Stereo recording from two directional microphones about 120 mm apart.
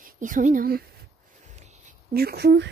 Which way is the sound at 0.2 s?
90° right.